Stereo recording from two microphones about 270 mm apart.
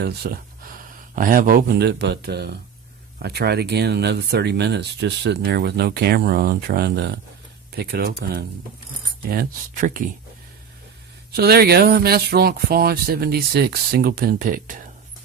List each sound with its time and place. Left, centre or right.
0.0 s speech: right
11.3 s speech: right